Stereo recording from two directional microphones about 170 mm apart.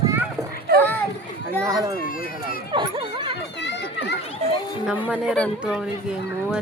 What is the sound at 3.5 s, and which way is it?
Children playing, 90° left.